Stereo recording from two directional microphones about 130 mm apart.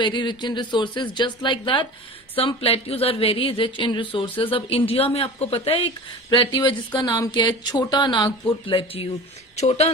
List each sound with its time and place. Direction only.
0.0 s speech: 35° left (ahead or behind)
2.3 s speech: 45° left (ahead or behind)
9.6 s speech: 55° left (ahead or behind)